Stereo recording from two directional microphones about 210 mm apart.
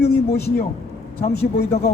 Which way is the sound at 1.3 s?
50° left (ahead or behind).